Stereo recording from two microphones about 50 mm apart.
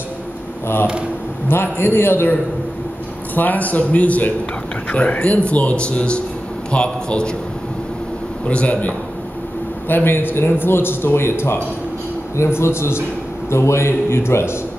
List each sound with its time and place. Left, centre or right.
1.5 s a man's voice: left
3.3 s speech: left
8.5 s speech: left
9.8 s a man's voice: left